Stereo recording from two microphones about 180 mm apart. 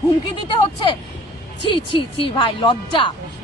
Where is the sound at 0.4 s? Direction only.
30° left (ahead or behind).